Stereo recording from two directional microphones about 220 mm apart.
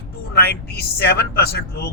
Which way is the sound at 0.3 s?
45° left (ahead or behind).